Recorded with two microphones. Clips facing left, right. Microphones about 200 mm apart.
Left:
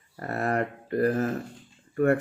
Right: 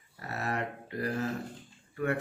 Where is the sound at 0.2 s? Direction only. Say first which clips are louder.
Left 7 dB; 50° left (ahead or behind).